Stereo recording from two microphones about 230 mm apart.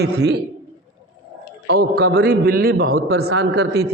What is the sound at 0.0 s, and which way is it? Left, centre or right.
Speech, right.